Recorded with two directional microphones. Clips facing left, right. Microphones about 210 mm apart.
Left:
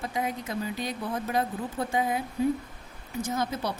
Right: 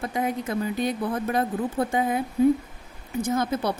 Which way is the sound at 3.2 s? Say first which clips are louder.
Right 5 dB; 60° right (ahead or behind).